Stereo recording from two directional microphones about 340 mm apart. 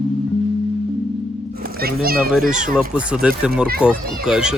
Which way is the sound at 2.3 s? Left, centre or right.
Centre.